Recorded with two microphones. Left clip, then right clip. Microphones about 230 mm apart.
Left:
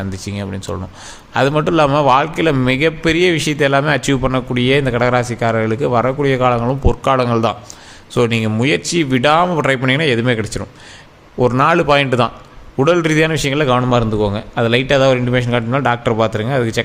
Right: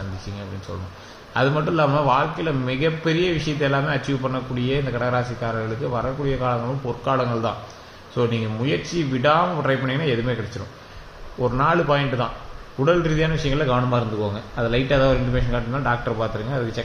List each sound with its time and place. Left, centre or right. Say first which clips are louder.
0.3 s a man's voice: left 10 dB; left
11.3 s a man's voice: left 7 dB; left